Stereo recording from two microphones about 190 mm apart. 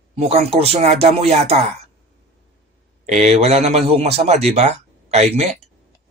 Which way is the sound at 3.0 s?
35° right (ahead or behind).